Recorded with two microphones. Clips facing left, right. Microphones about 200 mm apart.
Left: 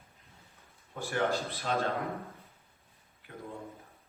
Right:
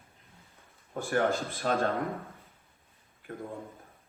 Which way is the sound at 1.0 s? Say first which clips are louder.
Right 3 dB; 50° right (ahead or behind).